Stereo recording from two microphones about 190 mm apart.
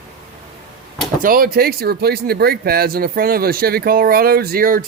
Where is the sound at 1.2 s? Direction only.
50° right (ahead or behind).